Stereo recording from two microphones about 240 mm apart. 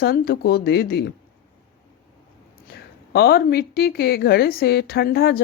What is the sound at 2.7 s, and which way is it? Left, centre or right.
Speech, left.